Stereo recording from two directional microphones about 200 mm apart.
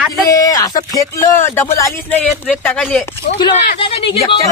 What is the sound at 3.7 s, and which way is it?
Speech, 30° left (ahead or behind).